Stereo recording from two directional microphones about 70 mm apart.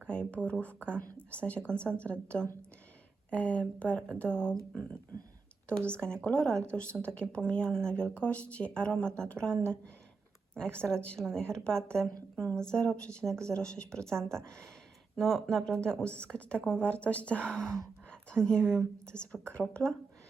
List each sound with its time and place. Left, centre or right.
0.1 s speech: centre
6.2 s speech: centre